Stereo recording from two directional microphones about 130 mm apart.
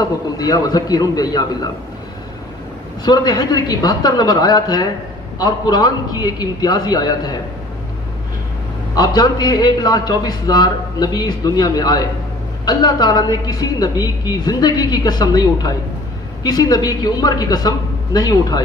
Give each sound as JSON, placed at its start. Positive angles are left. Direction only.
{"t": 0.0, "sound": "a man's voice", "side_deg": 30}
{"t": 3.1, "sound": "a man's voice", "side_deg": 30}
{"t": 8.9, "sound": "a man's voice", "side_deg": 30}